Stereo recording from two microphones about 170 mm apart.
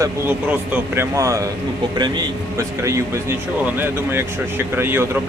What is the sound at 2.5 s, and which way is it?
Speech, 15° right (ahead or behind).